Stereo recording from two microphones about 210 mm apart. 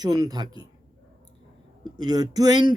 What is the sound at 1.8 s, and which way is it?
Speech, 20° right (ahead or behind).